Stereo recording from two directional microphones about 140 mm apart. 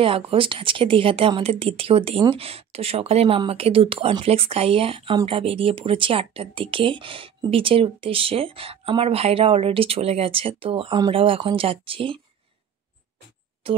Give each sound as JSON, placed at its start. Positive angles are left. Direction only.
{"t": 0.0, "sound": "speech", "side_deg": -40}